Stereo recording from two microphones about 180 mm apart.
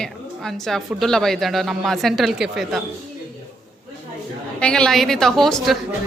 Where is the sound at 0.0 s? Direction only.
Centre (ahead or behind).